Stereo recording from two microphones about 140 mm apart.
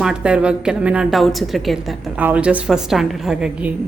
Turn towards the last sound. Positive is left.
turn(degrees=-5)  # may be behind; listen again after turning